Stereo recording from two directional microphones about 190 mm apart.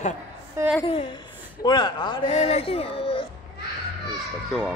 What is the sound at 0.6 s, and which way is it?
Speech, 15° right (ahead or behind).